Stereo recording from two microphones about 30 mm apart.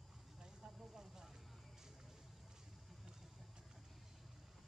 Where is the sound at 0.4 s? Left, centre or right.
Right.